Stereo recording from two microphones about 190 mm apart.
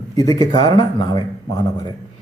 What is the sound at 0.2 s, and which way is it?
Speech, 20° left (ahead or behind).